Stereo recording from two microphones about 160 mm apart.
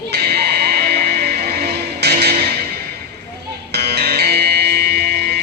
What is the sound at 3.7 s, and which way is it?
Music, 90° right.